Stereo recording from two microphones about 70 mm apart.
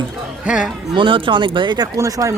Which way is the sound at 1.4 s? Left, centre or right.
Right.